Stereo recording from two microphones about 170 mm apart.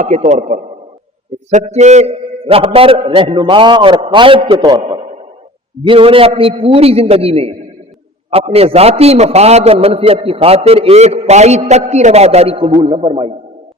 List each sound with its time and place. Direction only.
0.2 s a man's voice: 45° right (ahead or behind); by 4.8 s 25° right (ahead or behind)
4.8 s a sound: 35° right (ahead or behind)
5.8 s a man's voice: 30° right (ahead or behind)